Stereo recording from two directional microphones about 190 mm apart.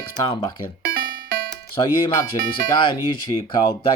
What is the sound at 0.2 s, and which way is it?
Speech, 25° left (ahead or behind).